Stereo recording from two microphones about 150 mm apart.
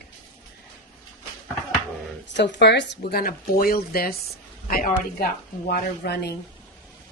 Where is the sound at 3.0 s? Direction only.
90° left.